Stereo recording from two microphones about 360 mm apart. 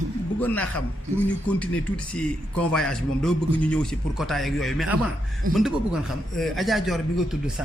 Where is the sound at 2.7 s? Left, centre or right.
Centre.